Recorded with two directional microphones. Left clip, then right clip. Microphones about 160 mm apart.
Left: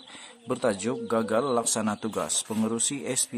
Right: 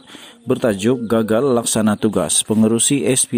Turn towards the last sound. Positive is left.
turn(degrees=-45)  # may be behind; listen again after turning